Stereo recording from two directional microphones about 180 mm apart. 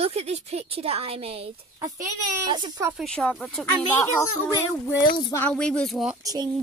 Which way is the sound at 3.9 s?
20° left (ahead or behind).